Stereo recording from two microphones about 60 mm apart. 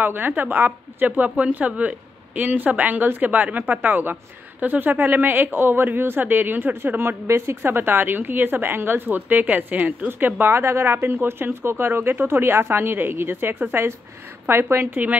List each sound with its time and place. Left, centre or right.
0.0 s speech: right
10.4 s a woman's voice: right